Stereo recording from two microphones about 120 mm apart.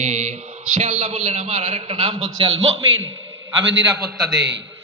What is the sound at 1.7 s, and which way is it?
A man's voice, 55° right (ahead or behind).